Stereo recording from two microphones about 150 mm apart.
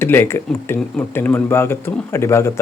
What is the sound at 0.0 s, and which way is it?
Speech, 15° left (ahead or behind).